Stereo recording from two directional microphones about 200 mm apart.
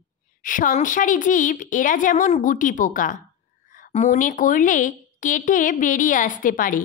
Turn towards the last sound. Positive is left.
turn(degrees=45)  # may be behind; listen again after turning